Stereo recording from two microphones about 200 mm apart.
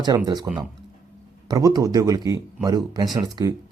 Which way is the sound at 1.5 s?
20° right (ahead or behind).